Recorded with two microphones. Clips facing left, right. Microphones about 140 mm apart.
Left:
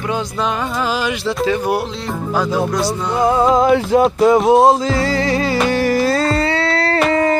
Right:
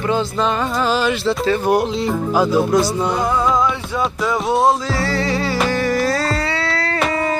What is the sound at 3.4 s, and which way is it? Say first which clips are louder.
Music: left 6 dB; 45° left (ahead or behind).